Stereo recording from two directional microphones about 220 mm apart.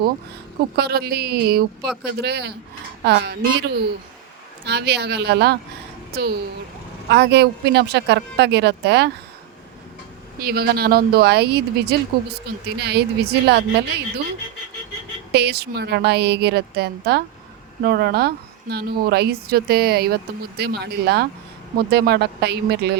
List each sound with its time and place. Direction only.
0.8 s a woman's voice: 45° right (ahead or behind)
10.4 s a woman's voice: 45° right (ahead or behind)
15.3 s a woman's voice: 50° right (ahead or behind)